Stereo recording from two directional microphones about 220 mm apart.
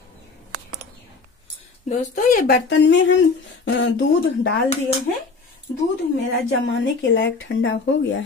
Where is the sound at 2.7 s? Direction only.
55° left (ahead or behind).